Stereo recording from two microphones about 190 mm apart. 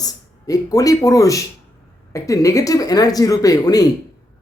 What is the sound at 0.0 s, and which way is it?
Speech, 20° left (ahead or behind).